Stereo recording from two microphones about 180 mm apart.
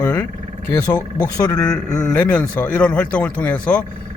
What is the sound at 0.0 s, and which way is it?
Speech, 20° left (ahead or behind).